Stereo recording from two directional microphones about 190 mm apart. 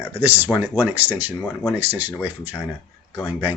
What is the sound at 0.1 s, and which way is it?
Speech, 10° right (ahead or behind).